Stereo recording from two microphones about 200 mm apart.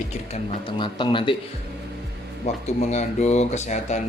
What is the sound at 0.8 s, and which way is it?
Speech, 25° left (ahead or behind).